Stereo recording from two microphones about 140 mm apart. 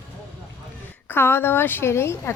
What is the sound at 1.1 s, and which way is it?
A woman's voice, 15° left (ahead or behind).